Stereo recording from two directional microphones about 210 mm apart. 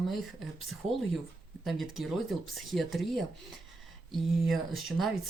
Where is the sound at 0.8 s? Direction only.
30° right (ahead or behind).